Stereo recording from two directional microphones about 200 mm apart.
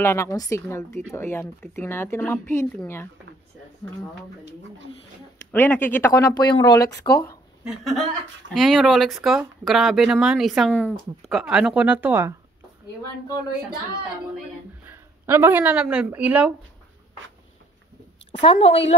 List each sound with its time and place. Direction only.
0.0 s speech: 15° left (ahead or behind)
5.5 s speech: 10° left (ahead or behind)
6.9 s speech: 50° left (ahead or behind)
7.6 s speech: centre (ahead or behind)
14.9 s speech: 10° right (ahead or behind)
18.4 s a woman's voice: 30° left (ahead or behind)